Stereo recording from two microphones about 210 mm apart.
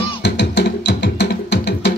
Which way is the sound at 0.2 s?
55° left (ahead or behind).